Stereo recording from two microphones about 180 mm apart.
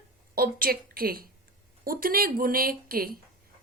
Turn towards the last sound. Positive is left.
turn(degrees=-55)  # may be behind; listen again after turning